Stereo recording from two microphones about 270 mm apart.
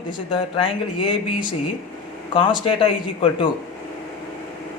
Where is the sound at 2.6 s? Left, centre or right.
Centre.